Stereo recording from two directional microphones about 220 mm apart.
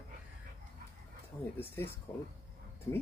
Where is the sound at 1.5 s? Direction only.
10° left (ahead or behind).